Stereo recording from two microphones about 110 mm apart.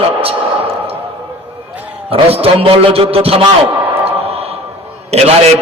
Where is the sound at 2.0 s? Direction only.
60° right (ahead or behind).